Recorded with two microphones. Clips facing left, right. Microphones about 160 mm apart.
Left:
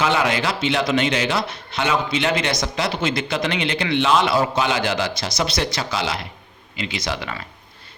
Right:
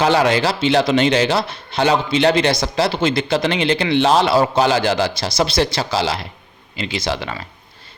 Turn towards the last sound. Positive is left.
turn(degrees=-30)  # may be behind; listen again after turning